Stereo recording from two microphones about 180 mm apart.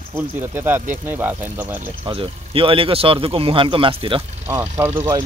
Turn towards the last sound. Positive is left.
turn(degrees=-15)  # may be behind; listen again after turning